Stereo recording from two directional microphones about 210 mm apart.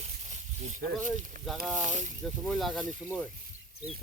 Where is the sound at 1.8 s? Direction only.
35° right (ahead or behind).